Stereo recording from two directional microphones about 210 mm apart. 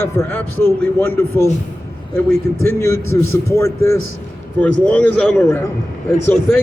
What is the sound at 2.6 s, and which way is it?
A man's voice, 15° left (ahead or behind).